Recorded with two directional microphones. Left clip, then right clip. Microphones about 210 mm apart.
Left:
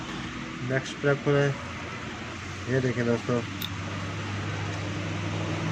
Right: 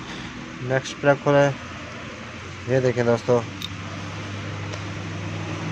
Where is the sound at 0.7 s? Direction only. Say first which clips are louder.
Right 7 dB; 45° right (ahead or behind).